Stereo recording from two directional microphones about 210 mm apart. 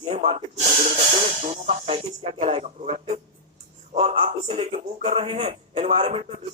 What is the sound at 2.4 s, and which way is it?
Speech, 30° right (ahead or behind).